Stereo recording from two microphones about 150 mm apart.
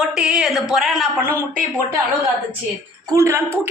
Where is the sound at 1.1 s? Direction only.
15° right (ahead or behind).